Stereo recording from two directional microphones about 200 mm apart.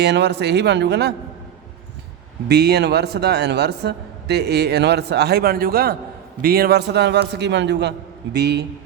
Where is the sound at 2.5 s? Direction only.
55° right (ahead or behind).